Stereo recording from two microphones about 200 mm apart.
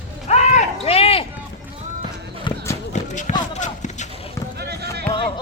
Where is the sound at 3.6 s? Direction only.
35° left (ahead or behind).